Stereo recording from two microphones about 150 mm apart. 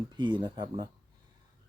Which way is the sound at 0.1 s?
30° right (ahead or behind).